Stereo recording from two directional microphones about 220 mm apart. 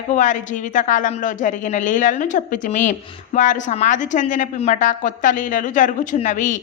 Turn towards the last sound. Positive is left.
turn(degrees=35)  # may be behind; listen again after turning